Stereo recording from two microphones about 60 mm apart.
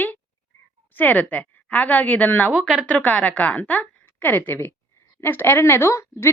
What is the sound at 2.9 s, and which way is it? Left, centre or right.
A woman's voice, left.